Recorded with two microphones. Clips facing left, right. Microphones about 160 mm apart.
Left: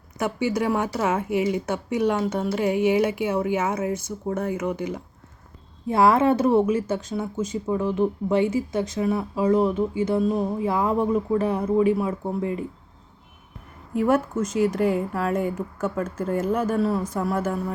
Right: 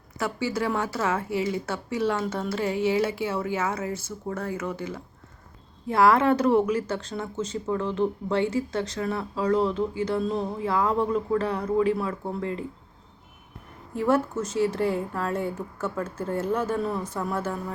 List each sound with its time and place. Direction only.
0.2 s speech: 20° left (ahead or behind)
13.9 s speech: 10° left (ahead or behind)